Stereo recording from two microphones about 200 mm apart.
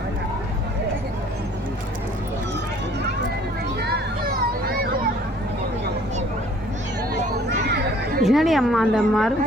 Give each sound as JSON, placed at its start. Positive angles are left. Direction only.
{"t": 4.3, "sound": "vehicle", "side_deg": -45}
{"t": 8.2, "sound": "a woman's voice", "side_deg": 0}